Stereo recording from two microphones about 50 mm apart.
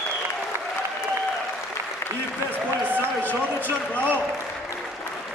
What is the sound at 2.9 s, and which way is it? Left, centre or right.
Run, right.